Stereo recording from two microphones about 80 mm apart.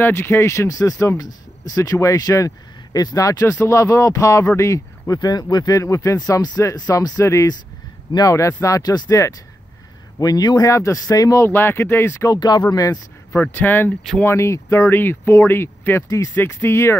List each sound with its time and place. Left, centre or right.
0.0 s speech: left
5.8 s speech: left
10.7 s speech: left
11.4 s speech: left
12.3 s speech: left
13.3 s speech: left
14.2 s speech: left